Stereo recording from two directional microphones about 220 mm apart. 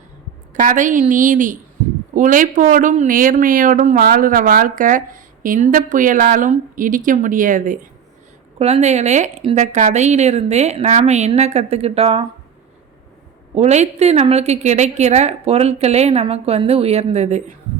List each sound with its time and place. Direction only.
0.5 s speech: 35° right (ahead or behind)
13.6 s a woman's voice: 30° right (ahead or behind)